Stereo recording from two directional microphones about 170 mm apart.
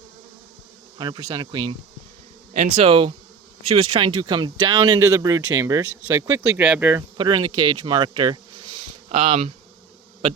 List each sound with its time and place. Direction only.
0.9 s speech: 25° right (ahead or behind)
2.5 s speech: 40° right (ahead or behind); by 7.0 s 10° right (ahead or behind)
7.2 s speech: 25° right (ahead or behind)